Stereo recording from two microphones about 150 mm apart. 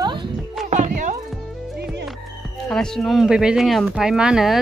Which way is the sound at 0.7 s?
55° right (ahead or behind).